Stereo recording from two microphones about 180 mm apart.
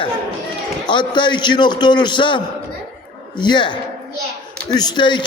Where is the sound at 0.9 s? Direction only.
25° left (ahead or behind).